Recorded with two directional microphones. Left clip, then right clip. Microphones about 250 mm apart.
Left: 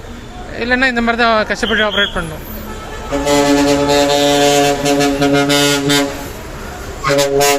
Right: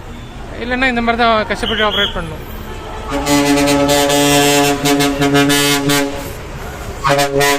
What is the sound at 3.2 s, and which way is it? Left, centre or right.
Music, right.